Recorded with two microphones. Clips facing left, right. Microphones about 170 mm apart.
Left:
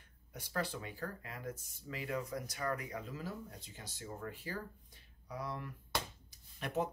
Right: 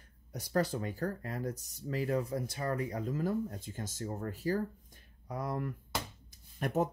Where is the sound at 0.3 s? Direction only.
40° right (ahead or behind).